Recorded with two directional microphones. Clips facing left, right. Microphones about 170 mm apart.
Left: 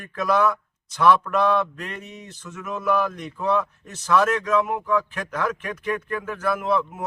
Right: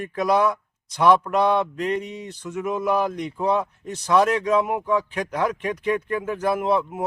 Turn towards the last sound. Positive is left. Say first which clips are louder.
# right 2 dB
turn(degrees=-25)  # may be behind; listen again after turning